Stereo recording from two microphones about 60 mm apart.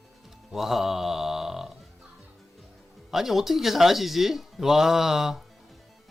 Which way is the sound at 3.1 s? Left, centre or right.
Centre.